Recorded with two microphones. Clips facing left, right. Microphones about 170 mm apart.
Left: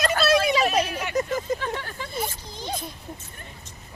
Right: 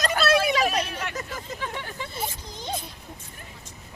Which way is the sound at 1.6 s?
15° right (ahead or behind).